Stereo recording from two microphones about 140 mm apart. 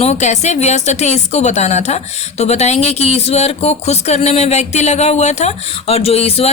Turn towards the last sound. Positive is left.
turn(degrees=45)  # may be behind; listen again after turning